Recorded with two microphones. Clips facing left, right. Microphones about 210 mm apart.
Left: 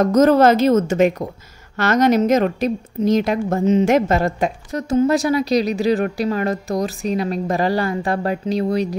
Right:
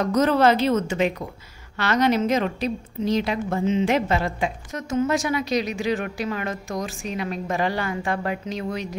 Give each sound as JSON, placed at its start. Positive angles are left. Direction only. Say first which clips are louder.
{"t": 0.0, "sound": "a woman's voice", "louder": "left 6 dB", "side_deg": 45}